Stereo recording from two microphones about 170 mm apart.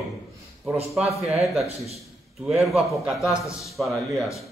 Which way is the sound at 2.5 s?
Centre (ahead or behind).